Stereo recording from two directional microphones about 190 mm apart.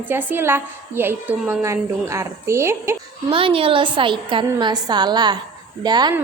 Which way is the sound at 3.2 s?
30° right (ahead or behind).